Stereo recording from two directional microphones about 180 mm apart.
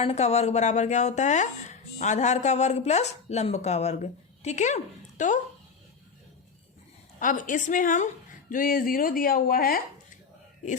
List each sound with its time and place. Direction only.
0.0 s speech: 35° left (ahead or behind)
7.2 s speech: 45° left (ahead or behind)